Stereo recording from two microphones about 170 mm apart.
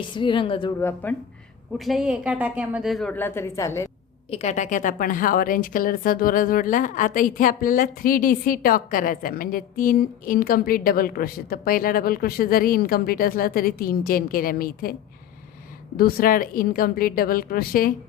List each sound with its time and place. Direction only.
0.1 s a woman's voice: 30° left (ahead or behind)
0.8 s a woman's voice: 15° left (ahead or behind)
1.8 s a woman's voice: centre (ahead or behind); by 3.8 s 15° left (ahead or behind)
4.3 s a woman's voice: 40° left (ahead or behind); by 14.9 s 60° left (ahead or behind)
16.0 s a woman's voice: 60° left (ahead or behind)